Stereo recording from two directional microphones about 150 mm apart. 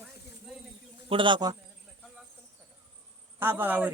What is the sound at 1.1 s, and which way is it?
Speech, 35° right (ahead or behind).